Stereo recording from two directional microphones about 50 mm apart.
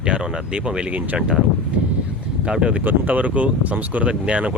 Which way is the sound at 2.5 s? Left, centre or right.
Right.